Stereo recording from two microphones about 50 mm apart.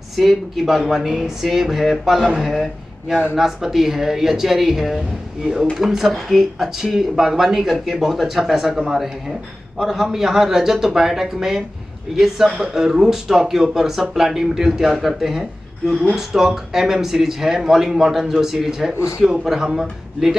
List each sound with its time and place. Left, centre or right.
0.1 s speech: centre
18.9 s a man's voice: left
19.4 s speech: centre